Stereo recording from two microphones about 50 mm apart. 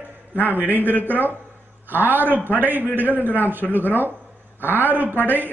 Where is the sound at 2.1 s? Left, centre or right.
Right.